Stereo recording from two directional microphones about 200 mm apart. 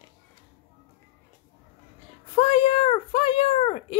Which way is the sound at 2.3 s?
25° left (ahead or behind).